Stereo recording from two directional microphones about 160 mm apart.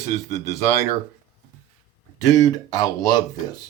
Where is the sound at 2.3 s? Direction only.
25° left (ahead or behind).